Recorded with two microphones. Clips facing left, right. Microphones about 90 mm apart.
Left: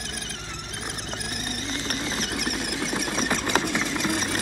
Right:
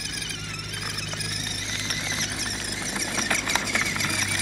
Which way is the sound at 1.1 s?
40° left (ahead or behind).